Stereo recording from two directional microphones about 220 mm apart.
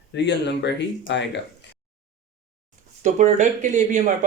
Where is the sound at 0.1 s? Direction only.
50° left (ahead or behind).